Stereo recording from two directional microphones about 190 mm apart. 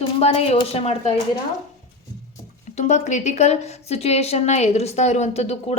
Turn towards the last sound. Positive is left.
turn(degrees=35)  # may be behind; listen again after turning